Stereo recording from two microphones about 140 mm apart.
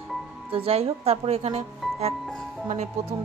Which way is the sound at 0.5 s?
45° right (ahead or behind).